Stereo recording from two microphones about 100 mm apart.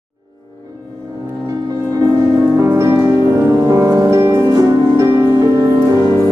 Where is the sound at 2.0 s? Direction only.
30° right (ahead or behind).